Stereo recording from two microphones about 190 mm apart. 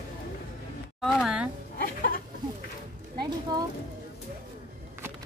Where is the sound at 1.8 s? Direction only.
50° left (ahead or behind).